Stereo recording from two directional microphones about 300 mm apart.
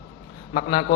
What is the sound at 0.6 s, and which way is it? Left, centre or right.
Speech, centre.